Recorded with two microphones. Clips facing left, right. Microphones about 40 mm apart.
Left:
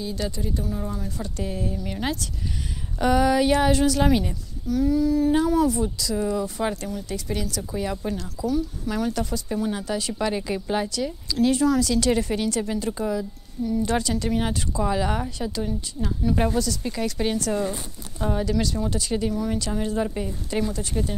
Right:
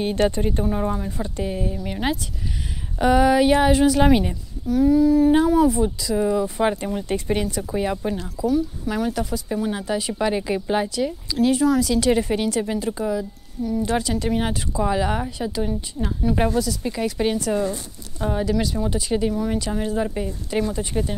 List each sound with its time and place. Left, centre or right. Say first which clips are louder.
0.0 s speech: right 9 dB; right
1.0 s speech: right 4 dB; right
6.9 s speech: right 6 dB; right; by 20.7 s centre
20.7 s speech: right 3 dB; centre